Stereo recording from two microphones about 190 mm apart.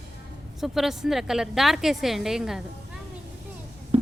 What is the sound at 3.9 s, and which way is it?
Writing, 30° right (ahead or behind).